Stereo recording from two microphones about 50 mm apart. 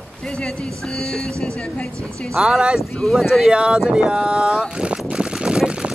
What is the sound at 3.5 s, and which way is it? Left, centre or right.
Speech, centre.